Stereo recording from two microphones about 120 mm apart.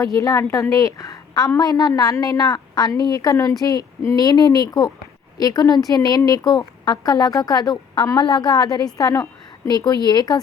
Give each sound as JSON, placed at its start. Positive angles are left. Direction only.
{"t": 0.0, "sound": "a woman's voice", "side_deg": 25}